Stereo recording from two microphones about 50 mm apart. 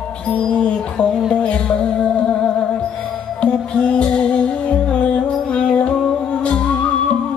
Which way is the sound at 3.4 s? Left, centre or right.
Left.